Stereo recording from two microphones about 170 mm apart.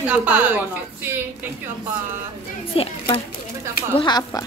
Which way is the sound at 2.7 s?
35° left (ahead or behind).